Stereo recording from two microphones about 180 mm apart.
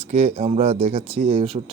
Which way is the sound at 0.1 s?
35° right (ahead or behind).